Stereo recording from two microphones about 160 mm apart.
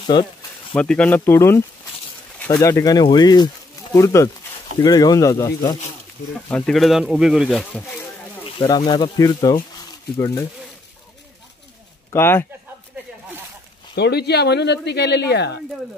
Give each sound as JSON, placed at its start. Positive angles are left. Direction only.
{"t": 0.0, "sound": "speech", "side_deg": 30}
{"t": 0.7, "sound": "speech", "side_deg": 5}
{"t": 6.5, "sound": "speech", "side_deg": 5}
{"t": 8.5, "sound": "speech", "side_deg": 30}
{"t": 12.1, "sound": "speech", "side_deg": 15}
{"t": 13.9, "sound": "speech", "side_deg": 90}